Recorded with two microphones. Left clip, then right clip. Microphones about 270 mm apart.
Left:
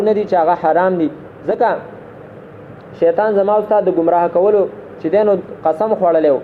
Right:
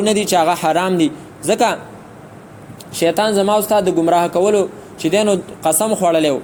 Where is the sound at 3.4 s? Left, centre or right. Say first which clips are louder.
Left 1 dB; right.